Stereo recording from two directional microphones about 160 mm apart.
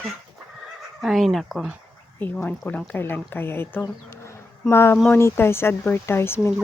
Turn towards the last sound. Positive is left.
turn(degrees=15)  # may be behind; listen again after turning